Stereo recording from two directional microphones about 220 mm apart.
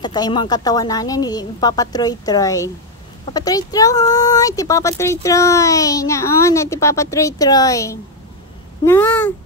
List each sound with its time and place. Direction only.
0.0 s speech: 20° left (ahead or behind)